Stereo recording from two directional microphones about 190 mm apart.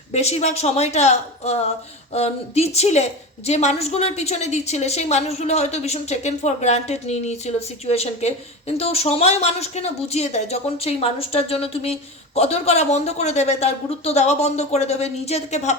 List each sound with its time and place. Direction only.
0.1 s a woman's voice: 35° left (ahead or behind)